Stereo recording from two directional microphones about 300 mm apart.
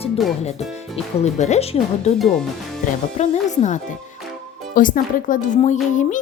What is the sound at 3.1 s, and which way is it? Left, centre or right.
Speech, left.